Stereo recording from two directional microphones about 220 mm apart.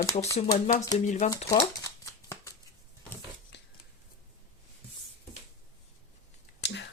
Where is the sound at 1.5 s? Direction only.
15° left (ahead or behind).